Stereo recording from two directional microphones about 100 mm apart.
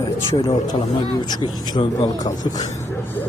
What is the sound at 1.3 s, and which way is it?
Speech, 50° left (ahead or behind).